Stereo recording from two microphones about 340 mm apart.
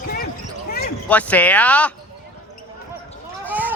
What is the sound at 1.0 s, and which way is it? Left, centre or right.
Speech, centre.